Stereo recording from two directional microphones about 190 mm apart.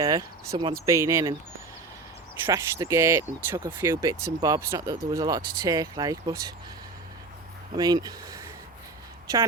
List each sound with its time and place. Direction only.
0.0 s speech: 15° right (ahead or behind)
2.5 s speech: 15° right (ahead or behind)
7.8 s speech: 20° right (ahead or behind)